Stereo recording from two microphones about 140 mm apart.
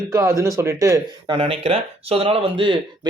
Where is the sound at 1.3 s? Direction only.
40° right (ahead or behind).